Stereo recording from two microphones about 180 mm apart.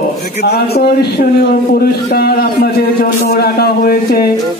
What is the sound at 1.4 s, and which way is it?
A man's voice, 55° left (ahead or behind).